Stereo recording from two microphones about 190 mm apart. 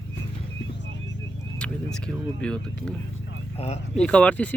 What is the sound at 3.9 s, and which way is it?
Speech, 5° left (ahead or behind).